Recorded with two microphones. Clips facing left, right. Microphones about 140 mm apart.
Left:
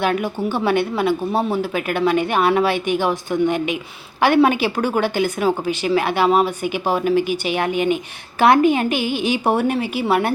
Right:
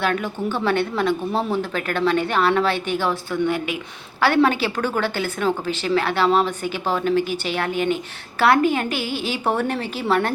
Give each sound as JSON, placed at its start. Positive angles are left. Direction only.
{"t": 0.0, "sound": "speech", "side_deg": 15}